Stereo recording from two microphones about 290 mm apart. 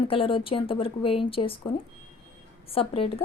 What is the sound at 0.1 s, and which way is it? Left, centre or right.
A woman's voice, centre.